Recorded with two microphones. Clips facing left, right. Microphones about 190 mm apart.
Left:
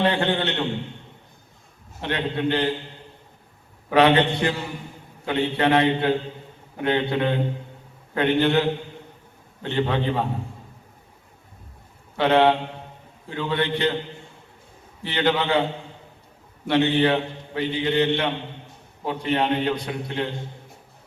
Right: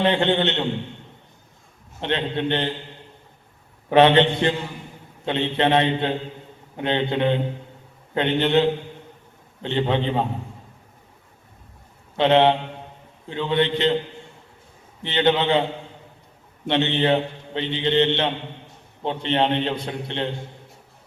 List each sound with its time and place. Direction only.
0.0 s a man's voice: 20° right (ahead or behind)
2.0 s a man's voice: 25° right (ahead or behind)
3.8 s a man's voice: 25° right (ahead or behind)
9.6 s a man's voice: 20° right (ahead or behind)
12.1 s a man's voice: 20° right (ahead or behind)
15.0 s a man's voice: 20° right (ahead or behind)
16.6 s a man's voice: 25° right (ahead or behind)